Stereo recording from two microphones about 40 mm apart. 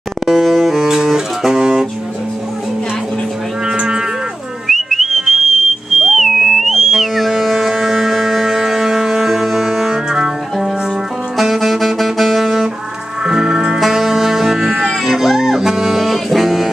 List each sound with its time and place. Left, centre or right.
0.3 s music: centre
0.8 s music: centre
3.6 s cattle: right
4.6 s whistling: centre
7.6 s music: centre
13.2 s music: centre
13.7 s music: centre